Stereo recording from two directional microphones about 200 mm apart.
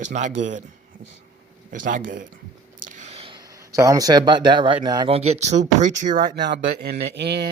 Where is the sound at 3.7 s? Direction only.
15° right (ahead or behind); by 7.4 s 55° right (ahead or behind).